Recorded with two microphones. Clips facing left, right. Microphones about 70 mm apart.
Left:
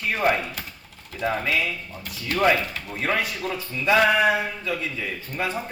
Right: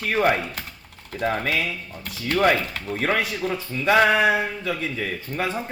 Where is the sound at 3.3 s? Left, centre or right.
Centre.